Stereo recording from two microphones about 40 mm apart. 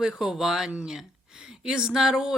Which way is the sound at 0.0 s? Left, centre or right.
Centre.